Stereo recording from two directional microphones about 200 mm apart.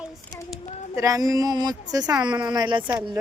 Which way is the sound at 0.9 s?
15° right (ahead or behind).